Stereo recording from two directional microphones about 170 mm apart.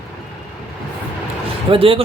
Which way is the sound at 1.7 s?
35° right (ahead or behind).